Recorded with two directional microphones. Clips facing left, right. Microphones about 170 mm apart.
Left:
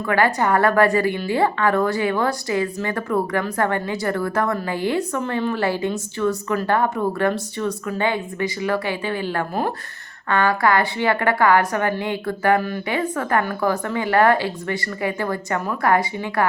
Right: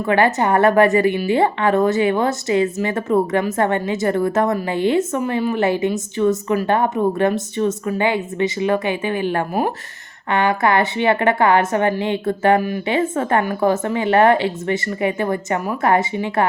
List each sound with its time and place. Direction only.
0.0 s speech: 20° right (ahead or behind)